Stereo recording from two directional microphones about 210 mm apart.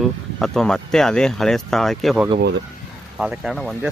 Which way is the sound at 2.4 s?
55° right (ahead or behind).